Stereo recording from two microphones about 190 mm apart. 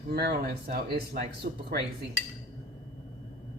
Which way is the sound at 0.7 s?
50° right (ahead or behind).